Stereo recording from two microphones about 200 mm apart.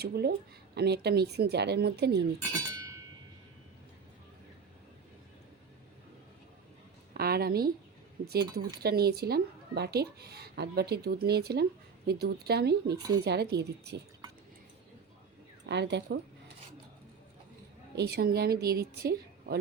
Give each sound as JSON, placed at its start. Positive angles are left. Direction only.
{"t": 0.0, "sound": "speech", "side_deg": -50}
{"t": 2.5, "sound": "chink", "side_deg": -20}
{"t": 7.1, "sound": "a sound", "side_deg": -50}
{"t": 8.2, "sound": "speech", "side_deg": -55}
{"t": 15.6, "sound": "speech", "side_deg": -60}
{"t": 17.9, "sound": "speech", "side_deg": -55}